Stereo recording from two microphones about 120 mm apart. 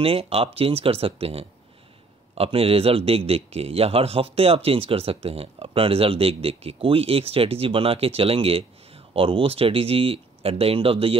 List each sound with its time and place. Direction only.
0.0 s a man's voice: 55° right (ahead or behind)